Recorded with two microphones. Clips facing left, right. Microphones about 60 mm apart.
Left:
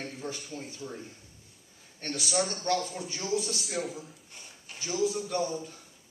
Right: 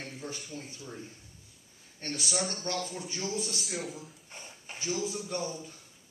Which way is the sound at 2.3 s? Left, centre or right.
Left.